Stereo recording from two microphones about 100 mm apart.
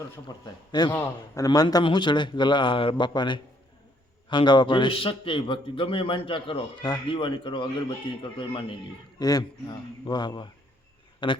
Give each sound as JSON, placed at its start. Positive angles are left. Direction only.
{"t": 0.3, "sound": "a man's voice", "side_deg": 40}
{"t": 9.1, "sound": "a man's voice", "side_deg": 40}